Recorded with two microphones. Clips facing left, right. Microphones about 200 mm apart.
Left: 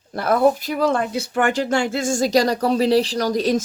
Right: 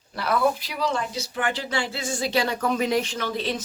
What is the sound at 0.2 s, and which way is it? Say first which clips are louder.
Speech: left 6 dB; 50° left (ahead or behind).